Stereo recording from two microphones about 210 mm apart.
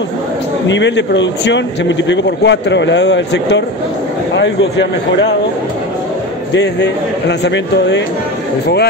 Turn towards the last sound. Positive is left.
turn(degrees=55)  # may be behind; listen again after turning